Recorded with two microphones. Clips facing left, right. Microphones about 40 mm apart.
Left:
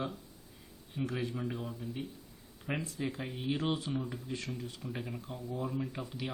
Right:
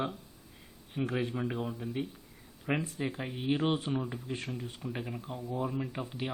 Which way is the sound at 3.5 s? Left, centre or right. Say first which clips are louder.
Right 4 dB; right.